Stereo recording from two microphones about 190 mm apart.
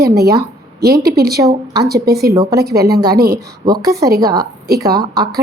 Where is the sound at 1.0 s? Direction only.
55° right (ahead or behind).